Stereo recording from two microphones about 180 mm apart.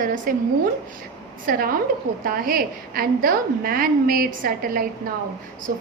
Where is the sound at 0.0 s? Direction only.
50° right (ahead or behind).